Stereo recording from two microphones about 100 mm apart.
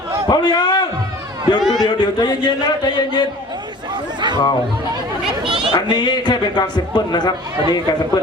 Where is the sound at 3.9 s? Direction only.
45° right (ahead or behind).